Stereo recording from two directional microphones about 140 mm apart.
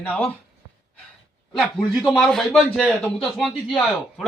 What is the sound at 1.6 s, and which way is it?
A man's voice, 5° left (ahead or behind).